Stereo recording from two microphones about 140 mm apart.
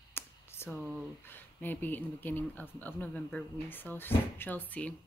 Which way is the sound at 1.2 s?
15° left (ahead or behind).